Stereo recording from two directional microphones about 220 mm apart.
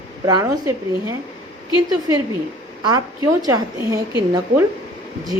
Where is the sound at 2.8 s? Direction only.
15° right (ahead or behind).